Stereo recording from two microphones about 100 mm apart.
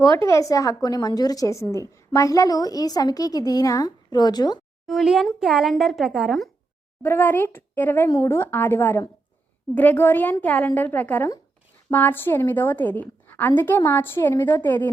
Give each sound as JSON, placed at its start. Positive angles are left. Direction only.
{"t": 0.0, "sound": "a woman's voice", "side_deg": 30}
{"t": 4.9, "sound": "speech", "side_deg": -5}
{"t": 7.0, "sound": "a woman's voice", "side_deg": 20}